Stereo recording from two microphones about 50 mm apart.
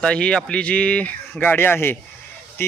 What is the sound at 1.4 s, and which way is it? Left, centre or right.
Speech, left.